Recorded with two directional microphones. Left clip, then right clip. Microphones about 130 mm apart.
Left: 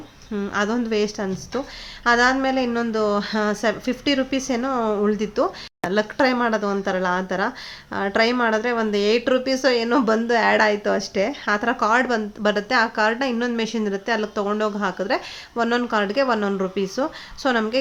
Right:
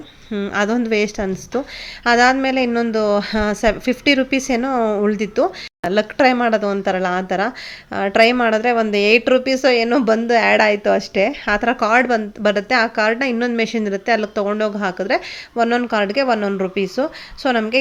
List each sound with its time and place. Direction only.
0.3 s a woman's voice: 25° right (ahead or behind)
0.5 s a woman's voice: 35° right (ahead or behind)